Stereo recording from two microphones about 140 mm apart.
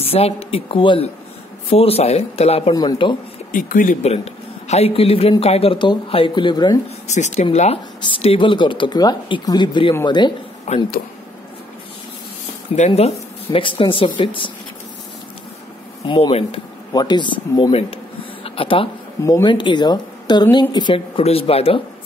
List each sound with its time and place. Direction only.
0.0 s speech: 45° left (ahead or behind)
2.7 s speech: 30° left (ahead or behind)
3.5 s speech: 75° left (ahead or behind)
4.0 s a man's voice: 50° left (ahead or behind); by 6.8 s 30° left (ahead or behind)
7.1 s speech: 55° left (ahead or behind); by 10.3 s 30° left (ahead or behind)
10.7 s speech: 50° left (ahead or behind)
12.7 s speech: 50° left (ahead or behind); by 14.5 s 35° left (ahead or behind)
16.1 s speech: 40° left (ahead or behind)
16.9 s speech: 30° left (ahead or behind)
18.4 s a sound: 40° left (ahead or behind)
19.2 s speech: 30° left (ahead or behind)
21.2 s speech: 45° left (ahead or behind)